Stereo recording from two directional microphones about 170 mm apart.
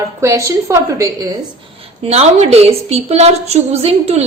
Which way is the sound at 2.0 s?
40° right (ahead or behind).